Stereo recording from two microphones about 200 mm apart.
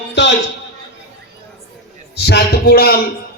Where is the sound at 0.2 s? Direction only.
65° left (ahead or behind).